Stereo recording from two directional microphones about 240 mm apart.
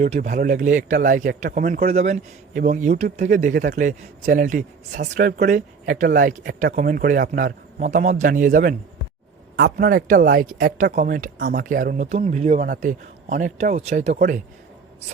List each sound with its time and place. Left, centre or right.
0.0 s speech: right